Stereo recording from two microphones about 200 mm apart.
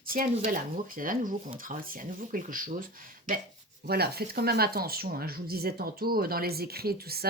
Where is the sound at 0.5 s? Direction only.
45° right (ahead or behind).